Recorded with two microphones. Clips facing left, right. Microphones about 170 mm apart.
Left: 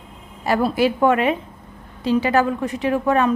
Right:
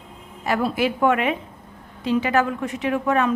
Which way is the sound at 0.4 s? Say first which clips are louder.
Left 3 dB; 35° left (ahead or behind).